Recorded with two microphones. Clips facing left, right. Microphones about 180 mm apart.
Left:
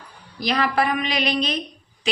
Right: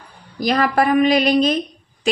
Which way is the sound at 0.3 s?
45° right (ahead or behind).